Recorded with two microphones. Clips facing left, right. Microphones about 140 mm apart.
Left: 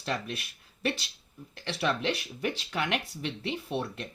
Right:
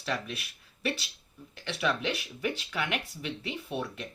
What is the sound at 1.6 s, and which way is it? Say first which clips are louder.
Speech: left 1 dB; 35° left (ahead or behind).